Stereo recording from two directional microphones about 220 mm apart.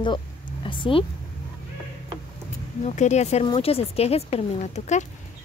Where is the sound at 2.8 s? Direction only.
30° left (ahead or behind).